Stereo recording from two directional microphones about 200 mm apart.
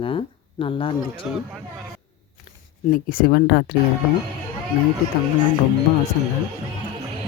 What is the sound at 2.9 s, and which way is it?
Speech, 45° left (ahead or behind).